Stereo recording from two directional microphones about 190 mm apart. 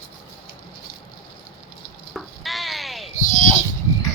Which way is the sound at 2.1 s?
Centre (ahead or behind).